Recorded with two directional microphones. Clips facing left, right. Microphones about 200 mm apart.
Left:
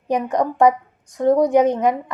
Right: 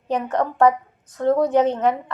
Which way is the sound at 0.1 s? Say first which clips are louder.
Left 2 dB; 15° left (ahead or behind).